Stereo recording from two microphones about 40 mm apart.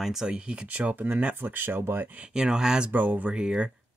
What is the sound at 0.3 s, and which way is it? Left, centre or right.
Speech, right.